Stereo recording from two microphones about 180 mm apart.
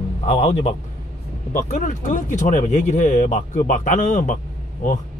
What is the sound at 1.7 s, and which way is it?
Speech, 45° left (ahead or behind).